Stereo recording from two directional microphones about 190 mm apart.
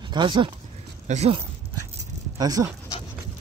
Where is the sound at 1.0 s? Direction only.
35° right (ahead or behind).